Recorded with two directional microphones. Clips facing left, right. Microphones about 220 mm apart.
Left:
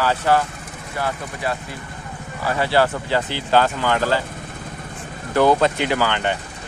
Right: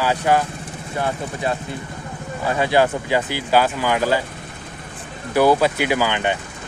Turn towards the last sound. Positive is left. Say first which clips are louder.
# right 1 dB
turn(degrees=-15)  # may be behind; listen again after turning